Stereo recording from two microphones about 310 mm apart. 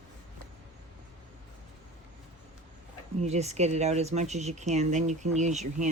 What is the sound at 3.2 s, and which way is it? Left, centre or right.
Speech, right.